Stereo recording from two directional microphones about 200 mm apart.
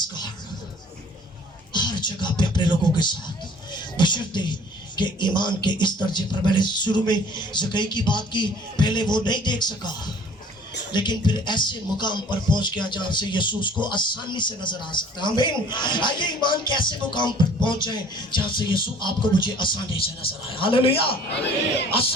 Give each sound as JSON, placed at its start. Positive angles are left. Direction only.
{"t": 0.0, "sound": "music", "side_deg": 20}
{"t": 1.7, "sound": "music", "side_deg": 20}
{"t": 3.7, "sound": "a man's voice", "side_deg": 20}
{"t": 10.9, "sound": "speech", "side_deg": 20}